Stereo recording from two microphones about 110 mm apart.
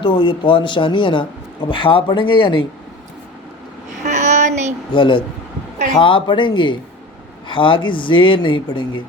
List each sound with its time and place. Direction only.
0.0 s a man's voice: 50° left (ahead or behind)
4.0 s a sound: 90° right
4.9 s a man's voice: 50° left (ahead or behind)